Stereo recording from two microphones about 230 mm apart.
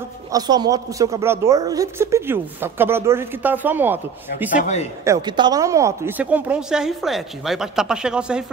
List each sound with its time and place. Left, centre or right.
0.3 s a woman's voice: centre
4.6 s a man's voice: left
5.0 s speech: centre